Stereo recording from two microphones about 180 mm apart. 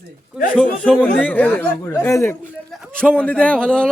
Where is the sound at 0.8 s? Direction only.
5° left (ahead or behind).